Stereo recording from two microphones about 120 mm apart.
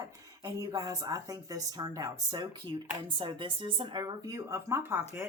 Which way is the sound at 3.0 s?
45° right (ahead or behind).